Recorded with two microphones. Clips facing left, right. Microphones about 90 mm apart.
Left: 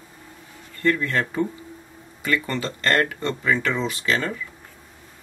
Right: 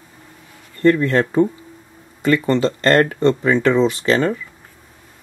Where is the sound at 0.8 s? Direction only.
30° right (ahead or behind).